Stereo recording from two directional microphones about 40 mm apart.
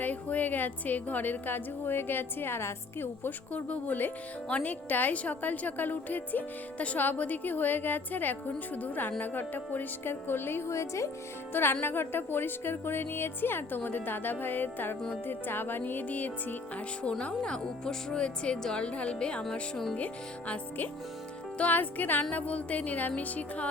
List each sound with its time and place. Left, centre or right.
0.0 s a woman's voice: left
3.5 s music: left
4.4 s a woman's voice: left
10.0 s speech: left
16.0 s a woman's voice: left
17.0 s speech: left
20.5 s a woman's voice: left
22.2 s music: left